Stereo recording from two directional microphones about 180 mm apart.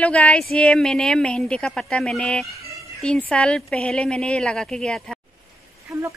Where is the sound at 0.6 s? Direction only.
5° left (ahead or behind).